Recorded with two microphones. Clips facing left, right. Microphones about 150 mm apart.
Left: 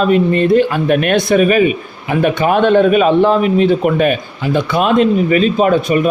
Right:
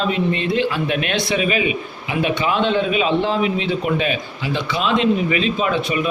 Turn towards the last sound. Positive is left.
turn(degrees=45)  # may be behind; listen again after turning